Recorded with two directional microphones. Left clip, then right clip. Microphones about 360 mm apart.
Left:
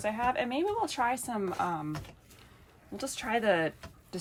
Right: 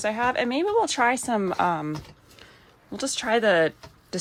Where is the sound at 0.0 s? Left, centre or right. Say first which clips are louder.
Right 6 dB; centre.